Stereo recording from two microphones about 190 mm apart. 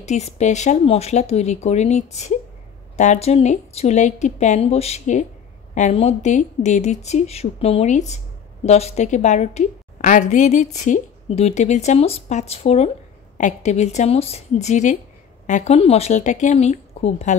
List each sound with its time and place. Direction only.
0.0 s a woman's voice: 35° left (ahead or behind)